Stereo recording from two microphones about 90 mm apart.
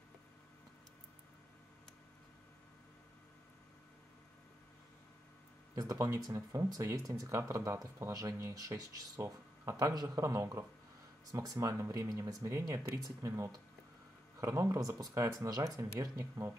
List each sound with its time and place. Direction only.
5.8 s speech: 35° right (ahead or behind)